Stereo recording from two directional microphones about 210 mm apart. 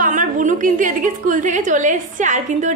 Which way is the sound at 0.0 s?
40° right (ahead or behind).